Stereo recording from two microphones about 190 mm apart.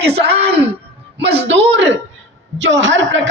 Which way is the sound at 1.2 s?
60° right (ahead or behind).